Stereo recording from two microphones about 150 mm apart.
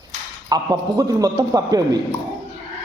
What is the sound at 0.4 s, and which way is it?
A man's voice, 25° right (ahead or behind).